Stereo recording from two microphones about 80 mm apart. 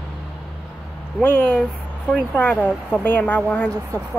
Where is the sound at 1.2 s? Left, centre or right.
Left.